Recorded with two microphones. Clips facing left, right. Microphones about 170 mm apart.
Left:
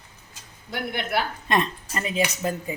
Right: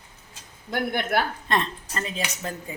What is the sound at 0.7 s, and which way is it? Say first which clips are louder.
Speech: right 2 dB; 50° right (ahead or behind).